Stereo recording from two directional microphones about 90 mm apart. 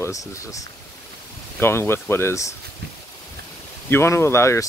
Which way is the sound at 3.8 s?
30° left (ahead or behind).